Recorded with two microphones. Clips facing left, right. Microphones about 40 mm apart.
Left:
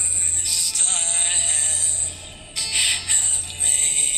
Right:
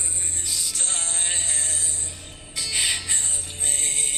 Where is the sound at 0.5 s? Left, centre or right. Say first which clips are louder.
Left 2 dB; left.